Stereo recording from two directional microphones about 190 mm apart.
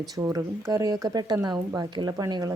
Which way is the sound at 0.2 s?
15° right (ahead or behind).